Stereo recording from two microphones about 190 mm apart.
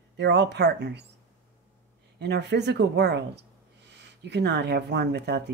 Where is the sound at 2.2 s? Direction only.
65° right (ahead or behind).